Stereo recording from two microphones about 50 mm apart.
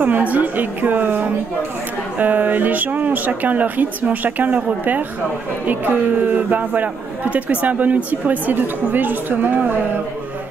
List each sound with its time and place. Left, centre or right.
0.0 s a man's voice: right
6.2 s a man's voice: right